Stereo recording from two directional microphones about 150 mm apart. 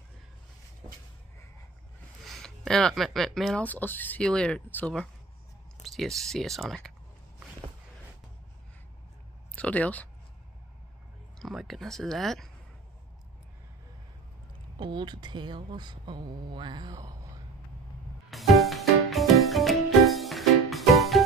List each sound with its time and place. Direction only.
2.2 s speech: centre (ahead or behind)
3.6 s speech: 10° left (ahead or behind)
9.6 s speech: 10° left (ahead or behind)
11.3 s speech: centre (ahead or behind)
14.8 s speech: 30° right (ahead or behind)
18.3 s music: centre (ahead or behind)